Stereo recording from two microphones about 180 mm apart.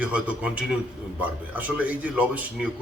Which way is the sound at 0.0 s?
5° right (ahead or behind).